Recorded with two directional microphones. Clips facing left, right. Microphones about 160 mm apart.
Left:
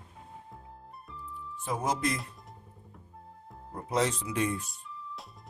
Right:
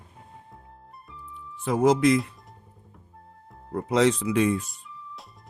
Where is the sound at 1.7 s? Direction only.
80° right.